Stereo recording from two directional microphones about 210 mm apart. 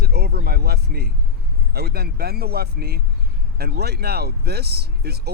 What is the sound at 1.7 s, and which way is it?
Speech, 50° right (ahead or behind).